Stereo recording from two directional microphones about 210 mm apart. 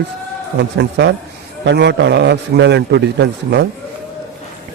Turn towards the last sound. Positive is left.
turn(degrees=-55)  # may be behind; listen again after turning